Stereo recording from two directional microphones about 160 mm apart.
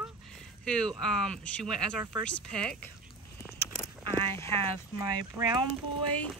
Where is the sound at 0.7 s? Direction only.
5° left (ahead or behind).